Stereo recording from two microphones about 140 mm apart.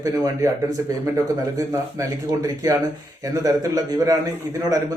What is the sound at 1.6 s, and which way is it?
A man's voice, 25° right (ahead or behind).